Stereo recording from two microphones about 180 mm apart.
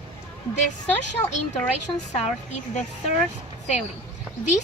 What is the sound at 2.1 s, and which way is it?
Speech, 40° left (ahead or behind).